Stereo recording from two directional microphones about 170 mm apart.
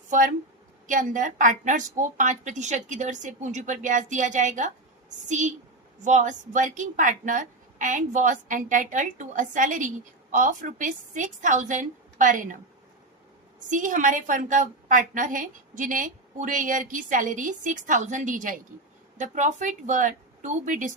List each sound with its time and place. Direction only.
0.9 s a woman's voice: 50° right (ahead or behind)
13.7 s a woman's voice: 50° right (ahead or behind)